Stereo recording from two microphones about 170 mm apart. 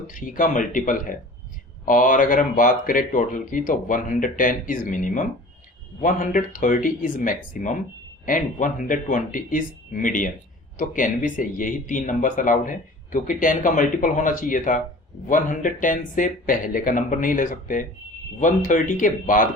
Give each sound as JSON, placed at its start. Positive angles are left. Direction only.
{"t": 0.1, "sound": "speech", "side_deg": 50}